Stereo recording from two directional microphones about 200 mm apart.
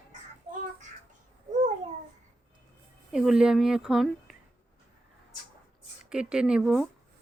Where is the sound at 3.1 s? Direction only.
5° right (ahead or behind).